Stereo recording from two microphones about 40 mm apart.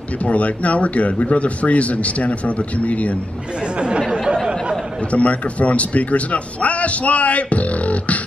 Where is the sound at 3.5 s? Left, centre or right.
Right.